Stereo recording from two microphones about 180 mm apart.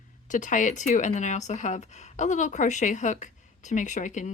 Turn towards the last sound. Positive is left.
turn(degrees=45)  # may be behind; listen again after turning